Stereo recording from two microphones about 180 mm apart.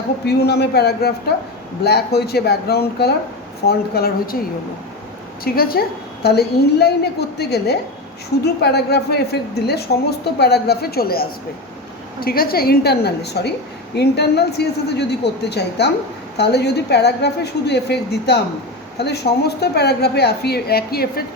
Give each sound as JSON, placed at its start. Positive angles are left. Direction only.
{"t": 0.3, "sound": "a woman's voice", "side_deg": 65}
{"t": 5.5, "sound": "a woman's voice", "side_deg": 55}